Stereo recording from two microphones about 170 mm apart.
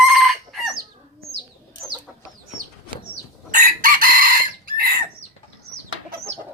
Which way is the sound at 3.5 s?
55° right (ahead or behind).